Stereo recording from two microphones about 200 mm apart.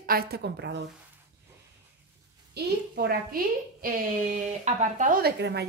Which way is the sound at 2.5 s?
50° right (ahead or behind).